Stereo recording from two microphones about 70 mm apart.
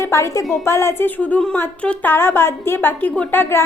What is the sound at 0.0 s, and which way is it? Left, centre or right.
A woman's voice, left.